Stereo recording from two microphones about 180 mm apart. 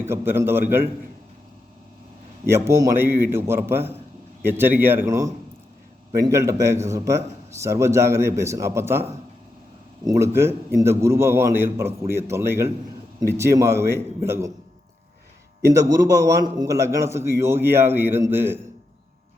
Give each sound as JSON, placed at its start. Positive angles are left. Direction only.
{"t": 0.0, "sound": "a man's voice", "side_deg": -15}
{"t": 2.5, "sound": "a man's voice", "side_deg": -15}
{"t": 15.7, "sound": "a man's voice", "side_deg": -20}